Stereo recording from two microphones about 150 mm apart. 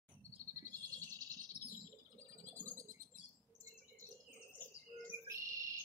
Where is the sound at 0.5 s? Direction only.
20° right (ahead or behind).